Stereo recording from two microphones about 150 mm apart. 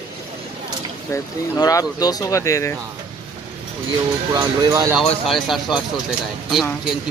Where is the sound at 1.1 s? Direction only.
25° left (ahead or behind).